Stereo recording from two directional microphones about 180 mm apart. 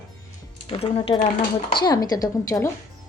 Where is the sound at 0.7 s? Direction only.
30° left (ahead or behind).